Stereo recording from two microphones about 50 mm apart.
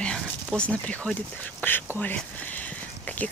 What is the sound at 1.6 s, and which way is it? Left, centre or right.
Speech, left.